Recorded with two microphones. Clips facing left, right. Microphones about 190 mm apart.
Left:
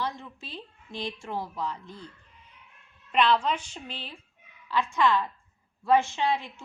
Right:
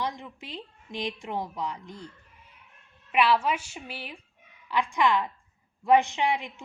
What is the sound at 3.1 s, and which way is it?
A woman's voice, 10° right (ahead or behind).